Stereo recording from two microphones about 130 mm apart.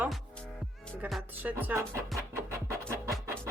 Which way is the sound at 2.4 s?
20° right (ahead or behind).